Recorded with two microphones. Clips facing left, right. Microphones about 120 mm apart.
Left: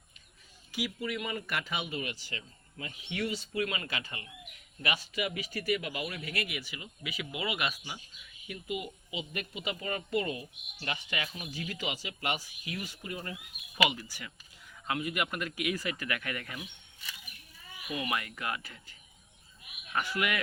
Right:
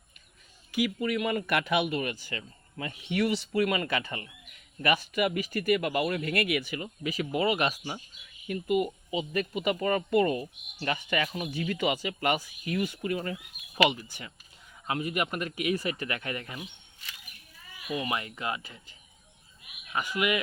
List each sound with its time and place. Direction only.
0.7 s speech: 55° right (ahead or behind)
3.2 s speech: 70° right (ahead or behind); by 8.0 s 40° right (ahead or behind)
8.5 s speech: 50° right (ahead or behind)
9.0 s speech: 40° right (ahead or behind); by 13.3 s 75° right (ahead or behind)
13.9 s speech: 20° right (ahead or behind)
17.9 s speech: 25° right (ahead or behind)